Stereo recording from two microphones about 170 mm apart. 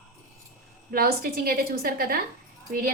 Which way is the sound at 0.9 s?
60° right (ahead or behind).